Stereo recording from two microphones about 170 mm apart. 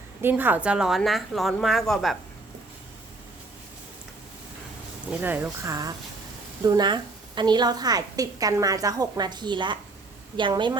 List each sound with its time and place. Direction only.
0.2 s a woman's voice: 10° right (ahead or behind)
5.2 s a woman's voice: 15° right (ahead or behind)